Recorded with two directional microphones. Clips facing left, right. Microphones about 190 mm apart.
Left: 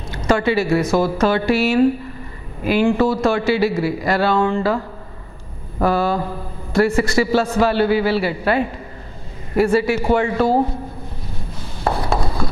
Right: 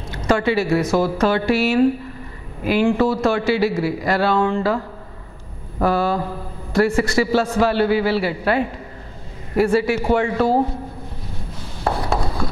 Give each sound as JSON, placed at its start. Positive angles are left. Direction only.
{"t": 0.3, "sound": "speech", "side_deg": 15}
{"t": 5.9, "sound": "speech", "side_deg": 15}
{"t": 6.1, "sound": "speech", "side_deg": 30}
{"t": 6.8, "sound": "speech", "side_deg": 10}
{"t": 11.8, "sound": "a sound", "side_deg": 25}